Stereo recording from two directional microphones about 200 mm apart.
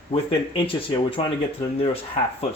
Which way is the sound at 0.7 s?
25° left (ahead or behind).